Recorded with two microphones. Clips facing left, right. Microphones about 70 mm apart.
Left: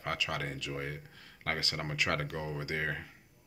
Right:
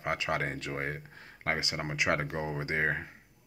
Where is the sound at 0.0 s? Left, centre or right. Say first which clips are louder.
Right 4 dB; right.